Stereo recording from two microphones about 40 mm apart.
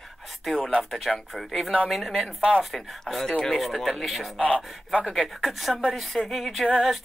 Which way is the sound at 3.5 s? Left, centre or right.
Centre.